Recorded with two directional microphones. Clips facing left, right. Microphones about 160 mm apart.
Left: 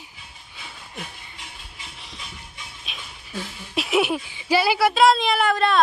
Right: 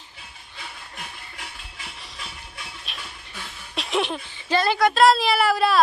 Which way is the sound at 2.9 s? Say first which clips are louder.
Left 1 dB; centre (ahead or behind).